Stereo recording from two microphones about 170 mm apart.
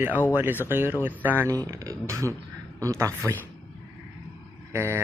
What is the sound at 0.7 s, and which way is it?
Speech, 10° right (ahead or behind).